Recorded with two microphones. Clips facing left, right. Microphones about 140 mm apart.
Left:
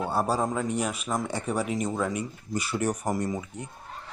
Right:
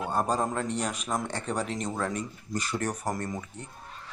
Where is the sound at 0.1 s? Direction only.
10° left (ahead or behind).